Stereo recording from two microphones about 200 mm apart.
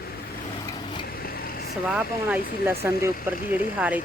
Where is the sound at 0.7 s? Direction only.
25° left (ahead or behind).